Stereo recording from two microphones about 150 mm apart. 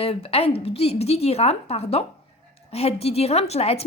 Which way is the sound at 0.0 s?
40° left (ahead or behind).